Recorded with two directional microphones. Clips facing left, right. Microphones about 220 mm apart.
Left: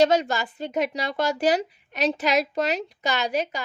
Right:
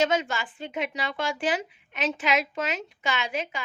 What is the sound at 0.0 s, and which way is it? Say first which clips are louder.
A woman's voice: left 5 dB; 40° left (ahead or behind).